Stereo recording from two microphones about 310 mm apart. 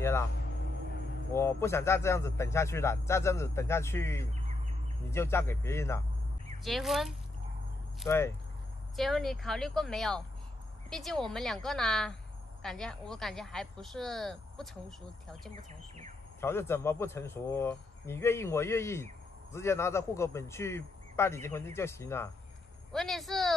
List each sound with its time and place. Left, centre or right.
1.3 s a man's voice: centre